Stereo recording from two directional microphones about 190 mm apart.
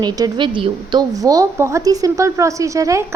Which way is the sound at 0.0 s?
25° right (ahead or behind).